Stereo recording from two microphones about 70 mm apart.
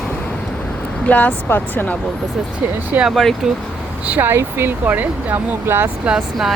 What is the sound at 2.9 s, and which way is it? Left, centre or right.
Speech, right.